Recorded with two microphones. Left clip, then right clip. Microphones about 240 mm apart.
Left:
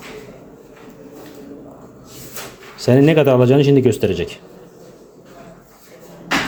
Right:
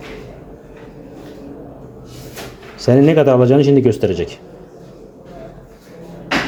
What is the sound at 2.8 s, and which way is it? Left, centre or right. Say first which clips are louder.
Speech: right 1 dB; centre.